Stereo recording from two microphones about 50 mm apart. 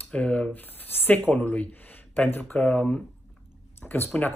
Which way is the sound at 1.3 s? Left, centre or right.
Left.